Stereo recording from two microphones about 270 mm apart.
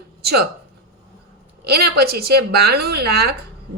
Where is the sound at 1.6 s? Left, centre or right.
Right.